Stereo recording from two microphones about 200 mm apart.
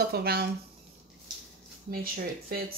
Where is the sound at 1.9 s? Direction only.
45° right (ahead or behind).